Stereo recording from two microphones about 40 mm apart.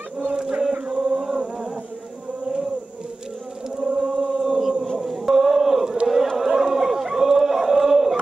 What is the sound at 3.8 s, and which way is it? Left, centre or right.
Chant, right.